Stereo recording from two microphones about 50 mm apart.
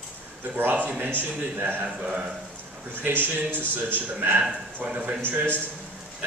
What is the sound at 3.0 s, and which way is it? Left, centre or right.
A man's voice, right.